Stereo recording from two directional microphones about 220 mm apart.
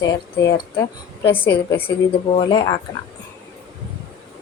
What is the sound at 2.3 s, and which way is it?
Speech, 20° left (ahead or behind).